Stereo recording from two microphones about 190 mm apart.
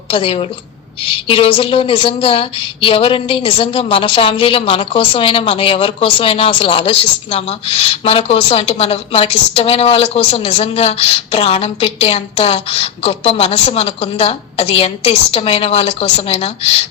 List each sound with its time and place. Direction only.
0.1 s a woman's voice: 30° left (ahead or behind)